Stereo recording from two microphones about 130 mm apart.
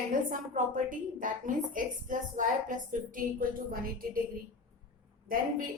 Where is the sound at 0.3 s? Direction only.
80° right.